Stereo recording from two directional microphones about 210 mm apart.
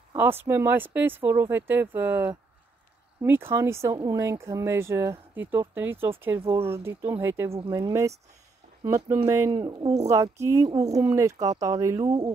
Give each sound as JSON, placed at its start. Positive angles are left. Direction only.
{"t": 0.1, "sound": "speech", "side_deg": -10}
{"t": 7.5, "sound": "speech", "side_deg": -20}